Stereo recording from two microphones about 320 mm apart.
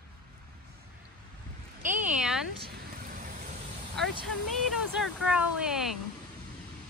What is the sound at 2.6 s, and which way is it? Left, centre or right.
Vehicle, right.